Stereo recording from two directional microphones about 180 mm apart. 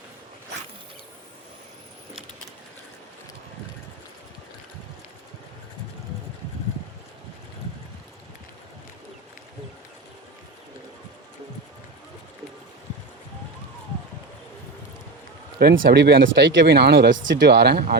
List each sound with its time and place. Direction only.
15.5 s speech: 60° right (ahead or behind)
17.2 s speech: 80° right